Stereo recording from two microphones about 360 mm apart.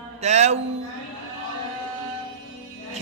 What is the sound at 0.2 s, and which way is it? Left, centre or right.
Speech, centre.